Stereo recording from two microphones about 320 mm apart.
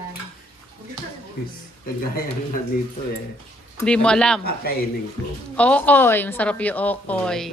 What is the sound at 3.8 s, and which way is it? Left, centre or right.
Speech, centre.